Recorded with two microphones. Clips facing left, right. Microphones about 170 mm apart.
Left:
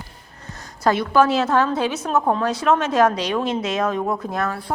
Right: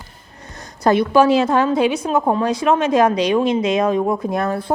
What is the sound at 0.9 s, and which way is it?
A woman's voice, 15° right (ahead or behind).